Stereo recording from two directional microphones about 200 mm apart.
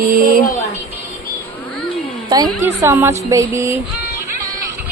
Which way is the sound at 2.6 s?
15° right (ahead or behind).